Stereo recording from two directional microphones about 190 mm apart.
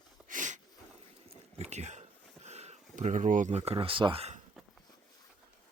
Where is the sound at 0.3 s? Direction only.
40° right (ahead or behind).